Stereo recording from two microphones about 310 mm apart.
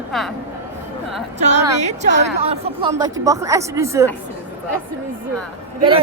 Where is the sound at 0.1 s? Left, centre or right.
Centre.